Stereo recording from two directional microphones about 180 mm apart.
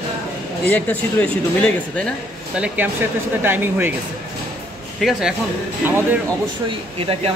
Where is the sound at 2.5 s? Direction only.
5° right (ahead or behind).